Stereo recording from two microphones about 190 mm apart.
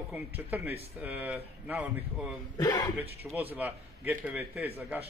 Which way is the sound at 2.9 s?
10° right (ahead or behind).